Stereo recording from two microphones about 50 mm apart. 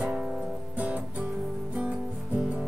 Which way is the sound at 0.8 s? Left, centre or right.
Right.